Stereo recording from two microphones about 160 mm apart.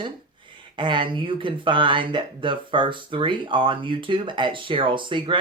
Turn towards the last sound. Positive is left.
turn(degrees=-30)  # may be behind; listen again after turning